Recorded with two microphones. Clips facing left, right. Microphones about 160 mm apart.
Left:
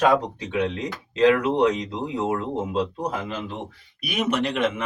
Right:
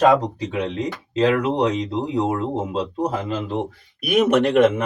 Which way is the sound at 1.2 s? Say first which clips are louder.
Even; 35° right (ahead or behind).